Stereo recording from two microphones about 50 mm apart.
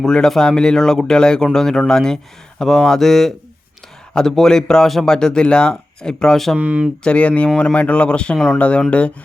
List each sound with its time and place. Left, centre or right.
0.0 s speech: centre
6.6 s speech: right
7.0 s speech: left